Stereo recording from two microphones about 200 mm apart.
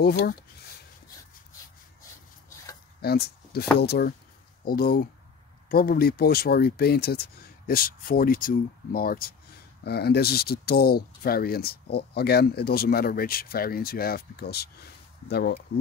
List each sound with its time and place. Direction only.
0.0 s speech: 55° left (ahead or behind)
3.0 s a sound: 50° left (ahead or behind)
3.8 s speech: 50° left (ahead or behind)